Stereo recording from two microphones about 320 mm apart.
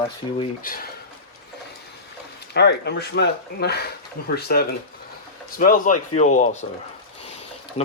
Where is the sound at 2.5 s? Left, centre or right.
Left.